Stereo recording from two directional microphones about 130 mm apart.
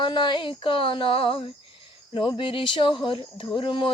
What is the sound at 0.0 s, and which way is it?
Speech, 40° left (ahead or behind).